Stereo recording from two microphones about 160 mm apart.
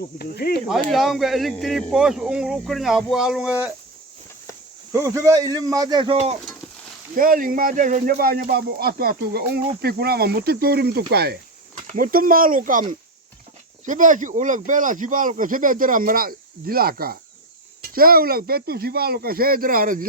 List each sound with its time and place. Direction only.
0.2 s speech: 75° left (ahead or behind)
0.7 s speech: centre (ahead or behind)
4.9 s speech: 20° right (ahead or behind); by 6.3 s 35° right (ahead or behind)
7.2 s speech: 60° right (ahead or behind); by 11.3 s 80° right
11.7 s speech: 50° right (ahead or behind)
13.8 s speech: 55° right (ahead or behind)